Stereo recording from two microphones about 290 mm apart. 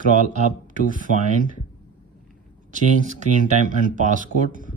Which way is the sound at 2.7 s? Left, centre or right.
Right.